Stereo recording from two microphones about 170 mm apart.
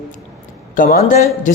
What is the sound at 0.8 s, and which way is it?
Speech, 50° left (ahead or behind).